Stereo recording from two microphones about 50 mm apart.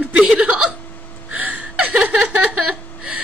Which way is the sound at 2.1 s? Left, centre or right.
Centre.